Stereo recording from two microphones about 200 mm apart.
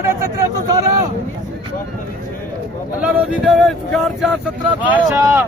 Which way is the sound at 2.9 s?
5° right (ahead or behind).